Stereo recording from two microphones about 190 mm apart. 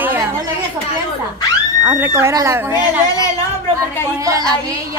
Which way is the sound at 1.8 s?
10° right (ahead or behind).